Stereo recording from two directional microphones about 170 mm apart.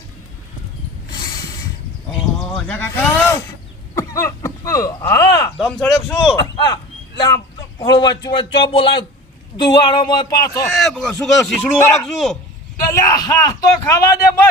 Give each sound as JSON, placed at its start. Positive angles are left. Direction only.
{"t": 2.5, "sound": "speech", "side_deg": 5}
{"t": 5.5, "sound": "speech", "side_deg": 5}
{"t": 6.4, "sound": "a man's voice", "side_deg": 25}
{"t": 10.7, "sound": "speech", "side_deg": 0}
{"t": 12.9, "sound": "a man's voice", "side_deg": 20}